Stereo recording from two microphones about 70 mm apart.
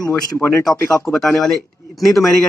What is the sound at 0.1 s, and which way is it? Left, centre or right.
Speech, left.